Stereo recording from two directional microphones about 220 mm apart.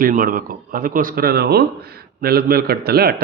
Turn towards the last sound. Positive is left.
turn(degrees=-45)  # may be behind; listen again after turning